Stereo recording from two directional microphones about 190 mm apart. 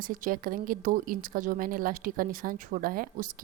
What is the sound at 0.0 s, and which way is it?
Speech, 45° right (ahead or behind).